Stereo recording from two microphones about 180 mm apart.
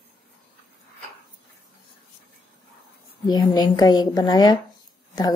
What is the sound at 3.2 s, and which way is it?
A woman's voice, 25° left (ahead or behind).